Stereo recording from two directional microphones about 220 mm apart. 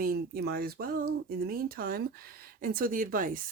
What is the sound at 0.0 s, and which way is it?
Speech, 45° right (ahead or behind).